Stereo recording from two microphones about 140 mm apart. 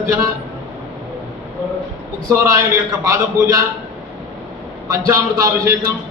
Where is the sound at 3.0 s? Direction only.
25° right (ahead or behind).